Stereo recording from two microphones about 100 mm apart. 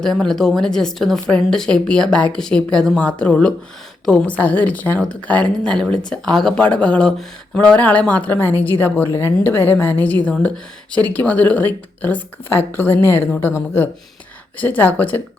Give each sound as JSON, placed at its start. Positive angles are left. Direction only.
{"t": 0.0, "sound": "a woman's voice", "side_deg": 5}